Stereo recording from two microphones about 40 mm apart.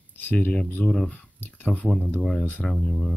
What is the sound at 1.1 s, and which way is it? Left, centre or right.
Speech, left.